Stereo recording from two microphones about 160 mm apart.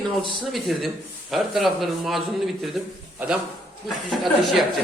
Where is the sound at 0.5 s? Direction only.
Centre (ahead or behind).